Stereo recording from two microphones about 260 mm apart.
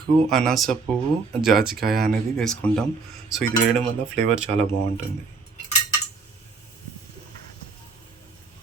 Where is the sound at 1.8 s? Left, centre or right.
Right.